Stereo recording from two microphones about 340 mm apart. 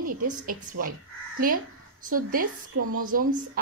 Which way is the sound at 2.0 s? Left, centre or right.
Right.